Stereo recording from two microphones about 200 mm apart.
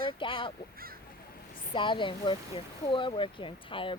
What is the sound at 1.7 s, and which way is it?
A woman's voice, 25° left (ahead or behind).